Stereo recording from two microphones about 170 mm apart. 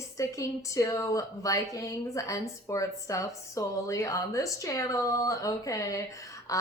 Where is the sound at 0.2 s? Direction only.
20° left (ahead or behind).